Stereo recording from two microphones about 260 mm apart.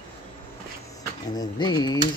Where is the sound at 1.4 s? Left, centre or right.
Centre.